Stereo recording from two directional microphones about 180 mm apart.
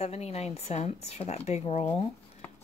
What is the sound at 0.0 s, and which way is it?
Speech, 35° left (ahead or behind).